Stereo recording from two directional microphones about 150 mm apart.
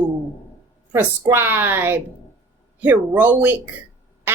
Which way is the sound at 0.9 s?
15° right (ahead or behind).